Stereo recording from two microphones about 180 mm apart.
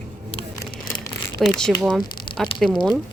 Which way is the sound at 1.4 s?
5° left (ahead or behind).